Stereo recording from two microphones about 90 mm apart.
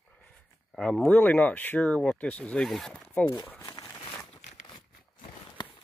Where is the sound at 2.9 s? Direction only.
15° left (ahead or behind).